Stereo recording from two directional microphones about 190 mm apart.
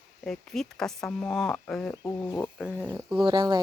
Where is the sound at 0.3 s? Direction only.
Centre (ahead or behind).